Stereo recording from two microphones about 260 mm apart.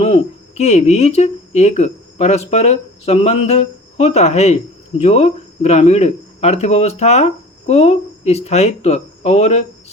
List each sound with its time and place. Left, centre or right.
0.0 s speech: left